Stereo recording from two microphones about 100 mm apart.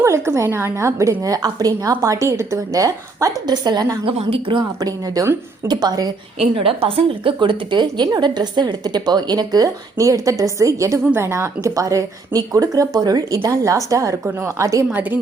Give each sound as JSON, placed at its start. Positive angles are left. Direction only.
{"t": 0.0, "sound": "a woman's voice", "side_deg": -30}
{"t": 4.0, "sound": "a woman's voice", "side_deg": -65}
{"t": 4.8, "sound": "a woman's voice", "side_deg": -35}
{"t": 6.4, "sound": "a woman's voice", "side_deg": -70}